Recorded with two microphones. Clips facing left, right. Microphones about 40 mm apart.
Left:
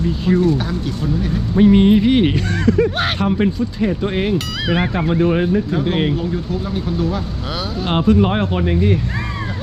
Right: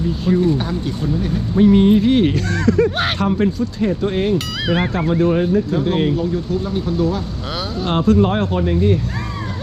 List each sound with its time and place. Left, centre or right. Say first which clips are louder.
0.3 s speech: left 1 dB; centre
1.5 s speech: left 1 dB; left
2.5 s speech: even; centre
3.2 s speech: even; left
3.6 s speech: even; centre
4.4 s speech: even; centre
5.3 s speech: even; left
7.5 s speech: even; centre
7.9 s speech: even; centre